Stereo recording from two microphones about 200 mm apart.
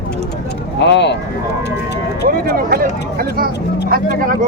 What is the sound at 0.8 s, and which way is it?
Speech, 60° left (ahead or behind).